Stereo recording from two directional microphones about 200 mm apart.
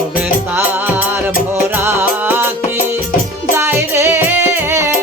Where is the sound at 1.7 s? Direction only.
10° right (ahead or behind).